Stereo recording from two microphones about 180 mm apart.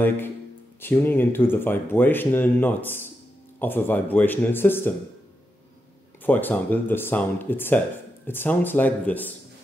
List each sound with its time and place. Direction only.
0.7 s speech: 10° left (ahead or behind)
6.2 s speech: 10° left (ahead or behind)